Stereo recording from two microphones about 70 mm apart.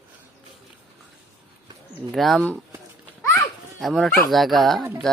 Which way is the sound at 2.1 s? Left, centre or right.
Centre.